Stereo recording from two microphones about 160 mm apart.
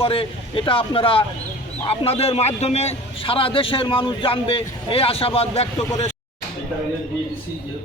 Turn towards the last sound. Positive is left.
turn(degrees=40)  # may be behind; listen again after turning